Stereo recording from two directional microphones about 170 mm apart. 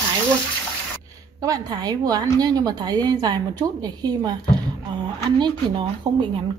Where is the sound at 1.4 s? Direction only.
20° right (ahead or behind).